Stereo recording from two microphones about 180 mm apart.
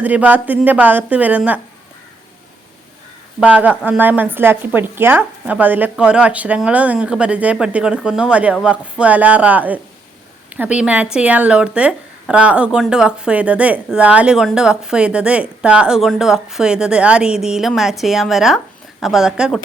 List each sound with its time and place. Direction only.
0.0 s a woman's voice: 10° right (ahead or behind)
3.4 s a woman's voice: 5° right (ahead or behind)